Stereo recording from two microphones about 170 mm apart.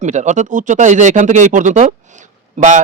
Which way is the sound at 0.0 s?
45° right (ahead or behind).